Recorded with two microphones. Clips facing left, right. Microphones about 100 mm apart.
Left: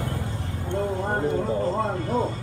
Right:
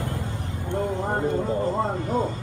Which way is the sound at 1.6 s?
15° right (ahead or behind).